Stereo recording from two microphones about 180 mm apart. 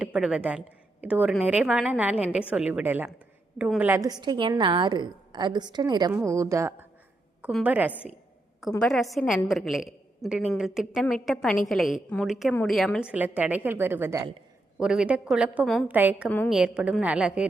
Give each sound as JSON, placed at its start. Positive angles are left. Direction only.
{"t": 0.0, "sound": "a woman's voice", "side_deg": -5}
{"t": 8.7, "sound": "a woman's voice", "side_deg": 5}
{"t": 14.8, "sound": "a woman's voice", "side_deg": -5}
{"t": 15.9, "sound": "a woman's voice", "side_deg": -10}